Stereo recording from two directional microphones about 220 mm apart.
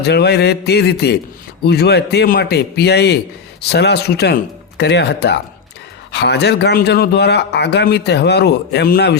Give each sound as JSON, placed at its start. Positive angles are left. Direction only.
{"t": 0.0, "sound": "speech", "side_deg": 50}